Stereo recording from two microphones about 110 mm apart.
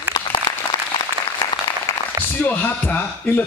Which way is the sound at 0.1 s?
45° left (ahead or behind).